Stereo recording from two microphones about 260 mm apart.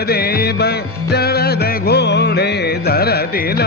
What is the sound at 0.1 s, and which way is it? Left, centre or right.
Music, left.